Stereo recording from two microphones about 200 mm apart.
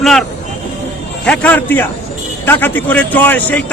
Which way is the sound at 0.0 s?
Centre (ahead or behind).